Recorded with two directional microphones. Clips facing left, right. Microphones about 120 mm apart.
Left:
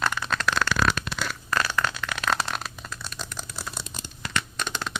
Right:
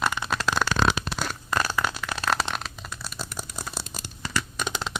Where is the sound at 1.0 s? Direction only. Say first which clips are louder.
Right 1 dB; 45° right (ahead or behind).